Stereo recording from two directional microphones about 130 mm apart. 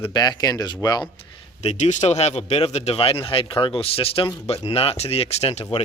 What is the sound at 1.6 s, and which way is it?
Speech, 60° left (ahead or behind).